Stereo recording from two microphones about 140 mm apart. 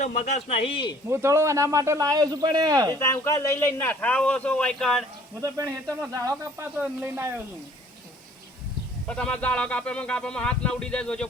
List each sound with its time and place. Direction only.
0.0 s speech: 55° left (ahead or behind); by 0.9 s 40° left (ahead or behind)
1.1 s speech: 20° right (ahead or behind)
2.9 s speech: 20° left (ahead or behind)
5.4 s speech: 20° right (ahead or behind)
9.0 s speech: 5° left (ahead or behind)